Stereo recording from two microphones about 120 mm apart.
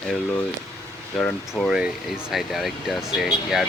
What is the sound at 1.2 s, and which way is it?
Speech, 5° left (ahead or behind).